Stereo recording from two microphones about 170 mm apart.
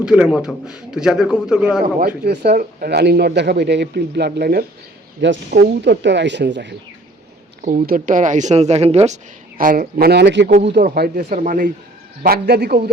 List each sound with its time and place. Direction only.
0.0 s a man's voice: 5° right (ahead or behind)
2.0 s speech: 70° right (ahead or behind)
5.2 s speech: 90° right
7.6 s a woman's voice: 45° right (ahead or behind)
9.6 s speech: 55° right (ahead or behind); by 10.5 s 90° right
10.8 s speech: 65° right (ahead or behind)
12.2 s speech: 65° right (ahead or behind)